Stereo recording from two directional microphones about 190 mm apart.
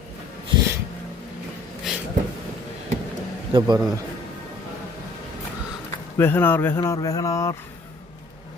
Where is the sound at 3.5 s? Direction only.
25° right (ahead or behind).